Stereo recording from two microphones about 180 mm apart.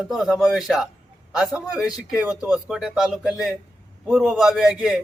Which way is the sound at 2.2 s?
5° right (ahead or behind).